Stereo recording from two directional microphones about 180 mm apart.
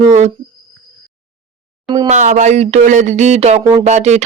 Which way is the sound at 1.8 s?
25° right (ahead or behind).